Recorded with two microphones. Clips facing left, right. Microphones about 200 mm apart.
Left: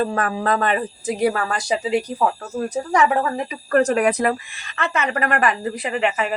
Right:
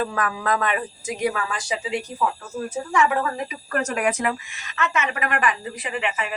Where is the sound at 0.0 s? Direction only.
35° left (ahead or behind).